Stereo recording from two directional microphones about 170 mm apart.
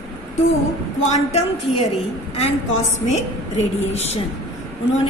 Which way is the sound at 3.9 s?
40° left (ahead or behind).